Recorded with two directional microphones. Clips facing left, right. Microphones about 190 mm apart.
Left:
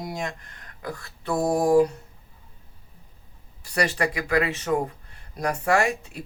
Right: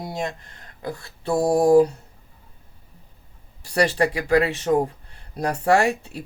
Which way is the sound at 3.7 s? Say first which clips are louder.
Right 5 dB; 30° right (ahead or behind).